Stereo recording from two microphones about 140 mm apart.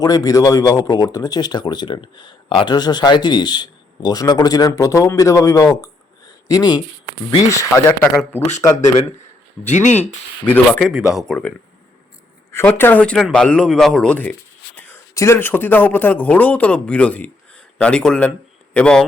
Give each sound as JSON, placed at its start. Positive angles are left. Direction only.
{"t": 0.0, "sound": "speech", "side_deg": 25}
{"t": 9.6, "sound": "speech", "side_deg": 60}
{"t": 9.9, "sound": "speech", "side_deg": 15}
{"t": 10.7, "sound": "speech", "side_deg": 0}